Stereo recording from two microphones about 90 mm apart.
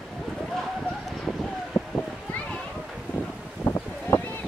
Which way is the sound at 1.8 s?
5° left (ahead or behind).